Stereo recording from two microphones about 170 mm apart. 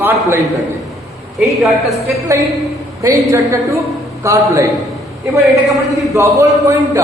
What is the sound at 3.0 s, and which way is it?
A woman's voice, 20° right (ahead or behind).